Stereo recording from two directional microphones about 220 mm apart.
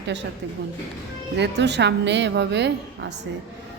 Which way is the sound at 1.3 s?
50° right (ahead or behind).